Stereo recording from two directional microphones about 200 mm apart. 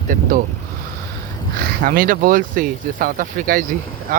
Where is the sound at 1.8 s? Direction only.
45° right (ahead or behind).